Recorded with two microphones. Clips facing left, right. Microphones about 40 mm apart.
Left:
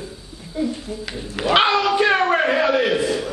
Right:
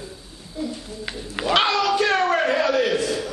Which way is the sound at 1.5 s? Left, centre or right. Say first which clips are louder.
Left 3 dB; centre.